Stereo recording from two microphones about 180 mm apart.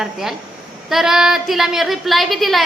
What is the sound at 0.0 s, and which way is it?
A woman's voice, centre (ahead or behind).